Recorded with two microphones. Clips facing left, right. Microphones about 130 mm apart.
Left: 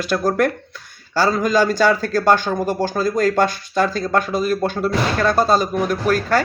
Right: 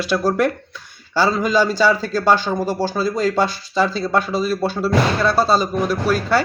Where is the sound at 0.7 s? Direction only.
45° left (ahead or behind).